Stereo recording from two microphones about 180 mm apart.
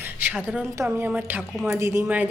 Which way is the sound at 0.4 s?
10° right (ahead or behind).